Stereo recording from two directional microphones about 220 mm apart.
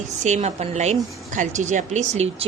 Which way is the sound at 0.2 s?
30° right (ahead or behind).